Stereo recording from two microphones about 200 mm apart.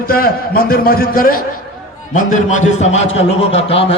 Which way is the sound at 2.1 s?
35° left (ahead or behind).